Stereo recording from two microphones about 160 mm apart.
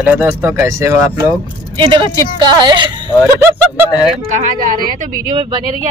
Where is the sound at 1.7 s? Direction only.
30° right (ahead or behind).